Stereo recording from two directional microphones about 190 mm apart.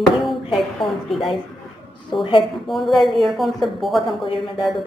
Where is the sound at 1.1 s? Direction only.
Centre (ahead or behind).